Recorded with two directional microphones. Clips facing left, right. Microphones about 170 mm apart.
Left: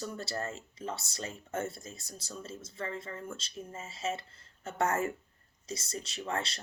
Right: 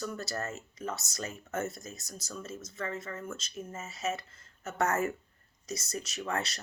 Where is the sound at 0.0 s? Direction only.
30° left (ahead or behind).